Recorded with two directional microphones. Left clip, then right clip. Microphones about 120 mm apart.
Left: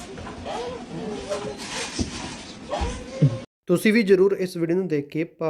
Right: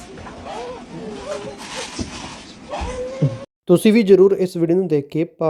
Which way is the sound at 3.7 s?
40° right (ahead or behind).